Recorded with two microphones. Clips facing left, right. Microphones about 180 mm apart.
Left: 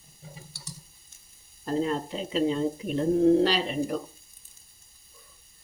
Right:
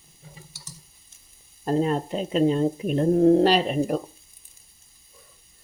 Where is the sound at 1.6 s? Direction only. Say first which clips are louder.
Right 4 dB; 55° right (ahead or behind).